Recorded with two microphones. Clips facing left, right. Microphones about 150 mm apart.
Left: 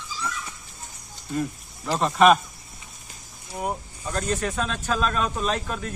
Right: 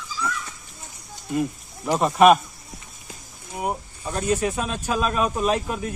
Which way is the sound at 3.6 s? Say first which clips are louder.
Right 2 dB; 10° right (ahead or behind).